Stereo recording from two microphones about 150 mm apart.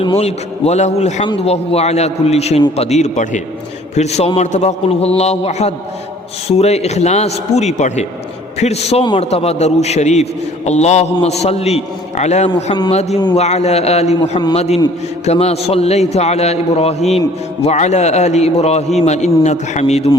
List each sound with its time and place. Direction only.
0.2 s a man's voice: 45° left (ahead or behind)